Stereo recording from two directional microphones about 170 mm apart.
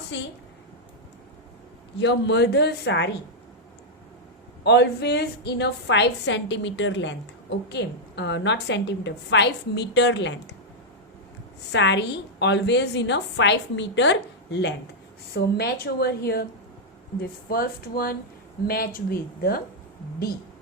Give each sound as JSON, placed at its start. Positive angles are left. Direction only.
{"t": 2.0, "sound": "a woman's voice", "side_deg": 90}
{"t": 4.6, "sound": "a woman's voice", "side_deg": 80}
{"t": 11.7, "sound": "a woman's voice", "side_deg": 90}
{"t": 15.3, "sound": "a woman's voice", "side_deg": 70}